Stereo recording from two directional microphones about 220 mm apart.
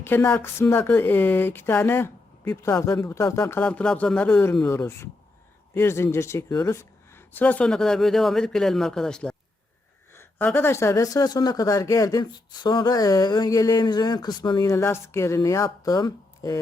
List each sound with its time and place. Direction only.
0.0 s a woman's voice: 10° left (ahead or behind)